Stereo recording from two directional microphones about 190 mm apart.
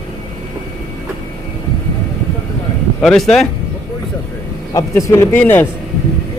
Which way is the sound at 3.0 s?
Centre (ahead or behind).